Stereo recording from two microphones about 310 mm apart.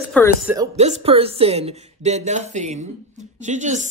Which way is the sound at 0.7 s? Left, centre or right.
Right.